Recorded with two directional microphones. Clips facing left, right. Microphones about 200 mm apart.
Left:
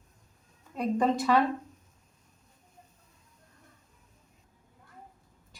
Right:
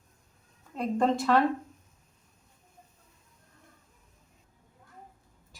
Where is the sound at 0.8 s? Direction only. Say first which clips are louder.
Even; centre (ahead or behind).